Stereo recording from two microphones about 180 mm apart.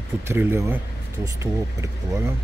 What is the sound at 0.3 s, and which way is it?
Speech, 15° right (ahead or behind).